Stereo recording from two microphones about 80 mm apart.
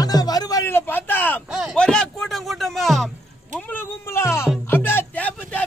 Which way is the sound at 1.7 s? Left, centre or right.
Centre.